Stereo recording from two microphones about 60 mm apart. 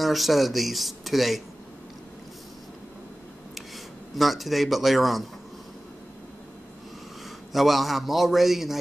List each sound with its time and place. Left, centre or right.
0.0 s speech: centre
4.2 s speech: centre
7.2 s a man's voice: centre